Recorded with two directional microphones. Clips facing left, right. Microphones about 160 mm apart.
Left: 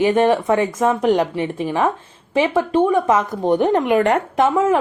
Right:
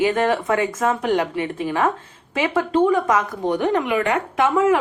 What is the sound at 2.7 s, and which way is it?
Speech, 20° left (ahead or behind).